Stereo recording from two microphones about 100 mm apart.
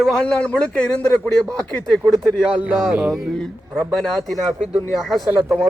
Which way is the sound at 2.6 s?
15° right (ahead or behind).